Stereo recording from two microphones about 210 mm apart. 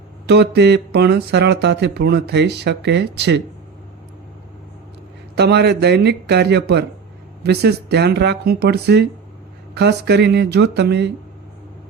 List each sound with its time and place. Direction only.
0.3 s speech: 50° right (ahead or behind)
5.3 s speech: 50° right (ahead or behind)